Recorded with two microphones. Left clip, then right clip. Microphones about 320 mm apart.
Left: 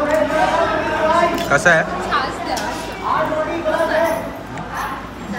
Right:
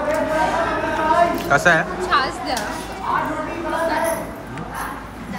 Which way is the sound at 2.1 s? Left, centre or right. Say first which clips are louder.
Right 2 dB; right.